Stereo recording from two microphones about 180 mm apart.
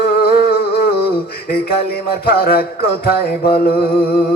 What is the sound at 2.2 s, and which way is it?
Music, 55° left (ahead or behind).